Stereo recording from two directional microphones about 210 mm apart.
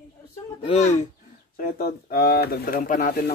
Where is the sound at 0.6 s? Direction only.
30° left (ahead or behind).